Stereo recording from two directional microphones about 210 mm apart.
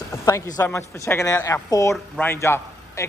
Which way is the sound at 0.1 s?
15° left (ahead or behind).